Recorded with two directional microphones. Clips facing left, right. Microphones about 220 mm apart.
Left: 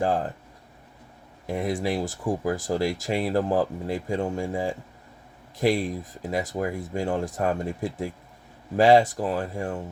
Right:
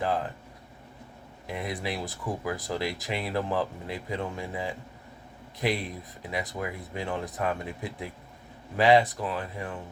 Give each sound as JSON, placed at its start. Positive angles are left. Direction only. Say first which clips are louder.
{"t": 0.0, "sound": "speech", "louder": "left 4 dB", "side_deg": 45}
{"t": 1.5, "sound": "speech", "louder": "left 7 dB", "side_deg": 45}